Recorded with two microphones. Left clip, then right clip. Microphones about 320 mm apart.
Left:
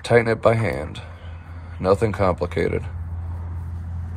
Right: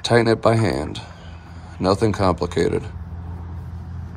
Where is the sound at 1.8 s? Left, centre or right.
Centre.